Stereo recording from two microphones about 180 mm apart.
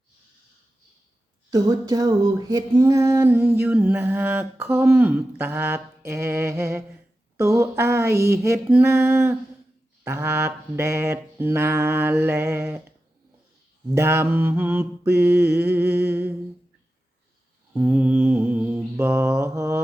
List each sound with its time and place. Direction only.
1.5 s music: 20° right (ahead or behind)
13.9 s music: 15° right (ahead or behind)
17.8 s mantra: 5° right (ahead or behind)